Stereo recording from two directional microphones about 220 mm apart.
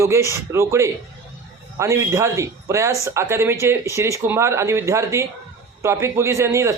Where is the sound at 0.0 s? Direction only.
15° right (ahead or behind).